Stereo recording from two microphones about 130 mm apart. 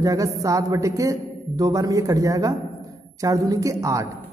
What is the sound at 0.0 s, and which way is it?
A woman's voice, 25° right (ahead or behind).